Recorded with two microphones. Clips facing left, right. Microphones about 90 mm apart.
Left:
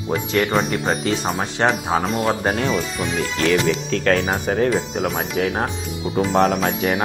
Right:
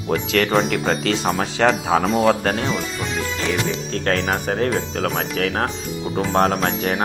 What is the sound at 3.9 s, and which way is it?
Speech, 40° right (ahead or behind).